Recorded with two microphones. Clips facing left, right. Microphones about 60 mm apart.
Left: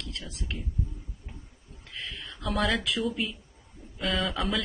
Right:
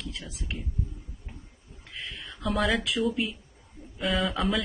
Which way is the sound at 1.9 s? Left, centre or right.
Centre.